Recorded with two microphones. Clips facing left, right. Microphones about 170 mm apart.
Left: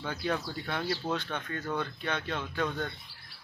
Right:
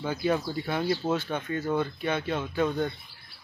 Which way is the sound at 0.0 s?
10° right (ahead or behind).